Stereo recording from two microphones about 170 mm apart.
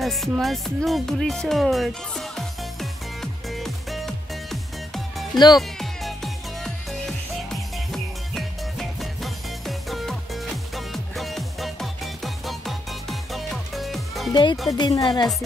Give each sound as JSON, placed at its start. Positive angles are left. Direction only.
{"t": 0.0, "sound": "music", "side_deg": 0}
{"t": 14.3, "sound": "speech", "side_deg": 25}